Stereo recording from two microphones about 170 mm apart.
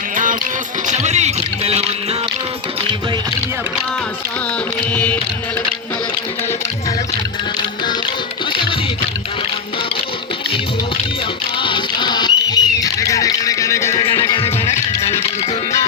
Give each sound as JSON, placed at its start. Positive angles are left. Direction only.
{"t": 0.9, "sound": "a sound", "side_deg": -45}
{"t": 4.9, "sound": "music", "side_deg": 10}
{"t": 11.6, "sound": "rodents", "side_deg": 25}
{"t": 14.1, "sound": "music", "side_deg": 15}
{"t": 14.3, "sound": "music", "side_deg": 35}